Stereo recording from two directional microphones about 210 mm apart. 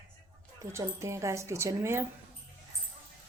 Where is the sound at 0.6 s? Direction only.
15° right (ahead or behind).